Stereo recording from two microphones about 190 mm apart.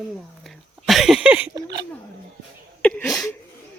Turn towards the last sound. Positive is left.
turn(degrees=5)  # may be behind; listen again after turning